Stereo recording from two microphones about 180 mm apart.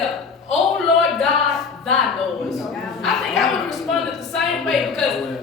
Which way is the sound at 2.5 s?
Centre (ahead or behind).